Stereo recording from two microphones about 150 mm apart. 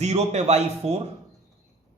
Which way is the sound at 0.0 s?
45° right (ahead or behind).